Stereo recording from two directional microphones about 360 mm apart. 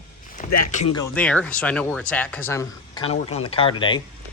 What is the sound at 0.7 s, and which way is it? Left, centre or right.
Speech, centre.